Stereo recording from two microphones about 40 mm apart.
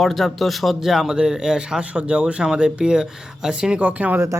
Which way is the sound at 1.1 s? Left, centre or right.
Centre.